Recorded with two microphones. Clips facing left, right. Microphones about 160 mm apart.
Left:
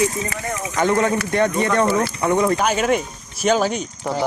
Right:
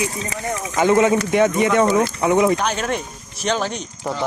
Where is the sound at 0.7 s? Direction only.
20° right (ahead or behind).